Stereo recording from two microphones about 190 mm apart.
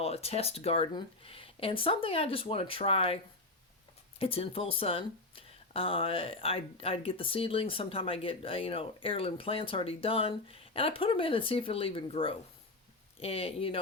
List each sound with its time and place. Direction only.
0.0 s speech: 30° left (ahead or behind)
4.2 s speech: 30° left (ahead or behind)